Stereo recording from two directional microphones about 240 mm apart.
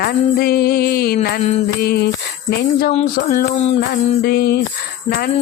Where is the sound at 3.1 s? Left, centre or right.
Left.